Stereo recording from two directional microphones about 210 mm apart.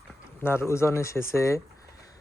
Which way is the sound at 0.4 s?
10° left (ahead or behind).